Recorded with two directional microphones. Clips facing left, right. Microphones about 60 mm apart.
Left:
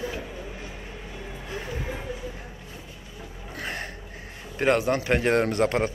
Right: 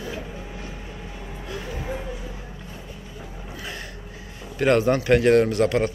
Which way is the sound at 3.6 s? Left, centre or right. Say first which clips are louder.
Left 3 dB; left.